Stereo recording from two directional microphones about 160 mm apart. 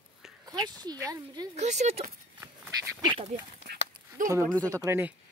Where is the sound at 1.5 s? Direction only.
45° right (ahead or behind).